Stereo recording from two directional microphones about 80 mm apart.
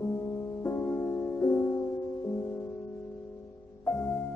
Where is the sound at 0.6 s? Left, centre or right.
Left.